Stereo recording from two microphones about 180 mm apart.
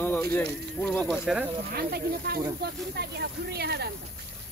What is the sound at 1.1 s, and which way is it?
Speech, 5° right (ahead or behind).